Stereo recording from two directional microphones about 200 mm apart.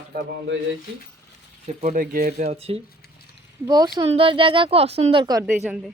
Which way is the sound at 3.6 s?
20° right (ahead or behind).